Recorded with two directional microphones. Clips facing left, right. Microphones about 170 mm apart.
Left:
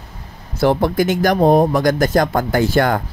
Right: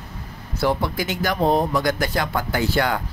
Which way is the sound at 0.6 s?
50° left (ahead or behind).